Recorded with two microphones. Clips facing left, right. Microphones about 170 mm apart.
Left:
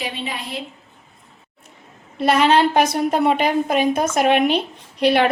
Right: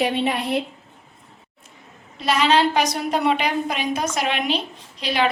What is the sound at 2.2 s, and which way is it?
A woman's voice, 55° left (ahead or behind).